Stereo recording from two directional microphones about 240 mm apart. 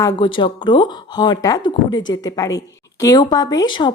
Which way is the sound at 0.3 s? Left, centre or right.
Centre.